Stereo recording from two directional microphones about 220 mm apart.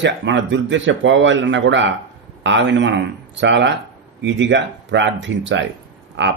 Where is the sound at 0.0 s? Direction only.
55° right (ahead or behind).